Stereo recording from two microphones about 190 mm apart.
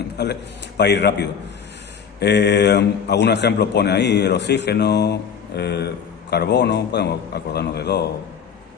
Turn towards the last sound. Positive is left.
turn(degrees=60)  # may be behind; listen again after turning